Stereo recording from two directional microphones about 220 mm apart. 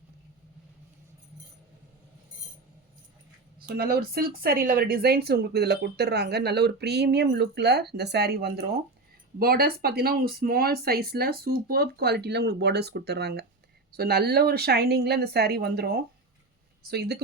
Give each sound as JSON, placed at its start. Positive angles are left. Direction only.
{"t": 3.8, "sound": "speech", "side_deg": -45}